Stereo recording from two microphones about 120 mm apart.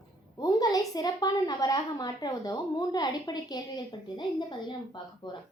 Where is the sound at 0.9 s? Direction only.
30° left (ahead or behind).